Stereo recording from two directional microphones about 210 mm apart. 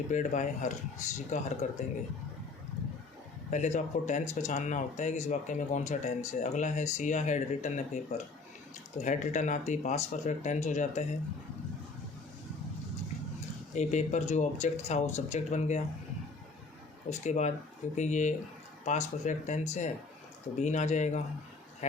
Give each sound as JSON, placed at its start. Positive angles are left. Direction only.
{"t": 0.1, "sound": "speech", "side_deg": 35}
{"t": 3.5, "sound": "speech", "side_deg": 35}
{"t": 13.7, "sound": "speech", "side_deg": 35}
{"t": 17.1, "sound": "speech", "side_deg": 35}